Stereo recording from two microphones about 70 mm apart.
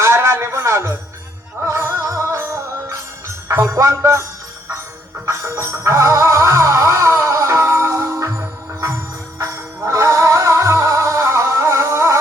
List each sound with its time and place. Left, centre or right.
0.0 s a sound: right
1.6 s music: right
5.2 s music: right
9.4 s music: right